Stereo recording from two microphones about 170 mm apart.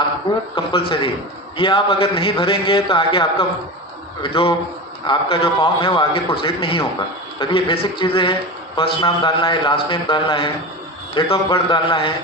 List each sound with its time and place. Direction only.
0.5 s a man's voice: 30° left (ahead or behind)